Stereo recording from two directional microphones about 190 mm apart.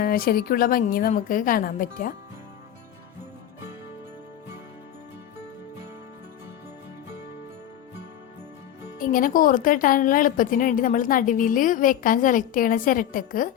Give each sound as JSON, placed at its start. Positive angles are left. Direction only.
{"t": 0.0, "sound": "speech", "side_deg": 50}
{"t": 9.0, "sound": "speech", "side_deg": 45}